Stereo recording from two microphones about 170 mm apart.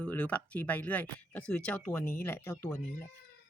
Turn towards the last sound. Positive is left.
turn(degrees=15)  # may be behind; listen again after turning